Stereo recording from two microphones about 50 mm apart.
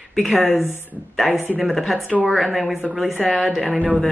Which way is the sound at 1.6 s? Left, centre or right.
Centre.